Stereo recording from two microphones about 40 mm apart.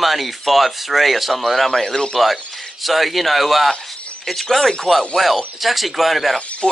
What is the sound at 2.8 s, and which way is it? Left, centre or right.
Speech, centre.